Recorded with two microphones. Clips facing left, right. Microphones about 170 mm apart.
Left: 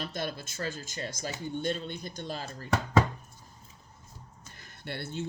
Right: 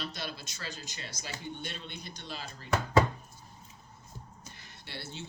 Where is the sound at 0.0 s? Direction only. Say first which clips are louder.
Left 5 dB; 50° left (ahead or behind).